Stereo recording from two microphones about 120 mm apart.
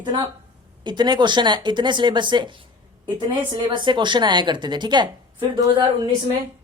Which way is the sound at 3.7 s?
40° right (ahead or behind).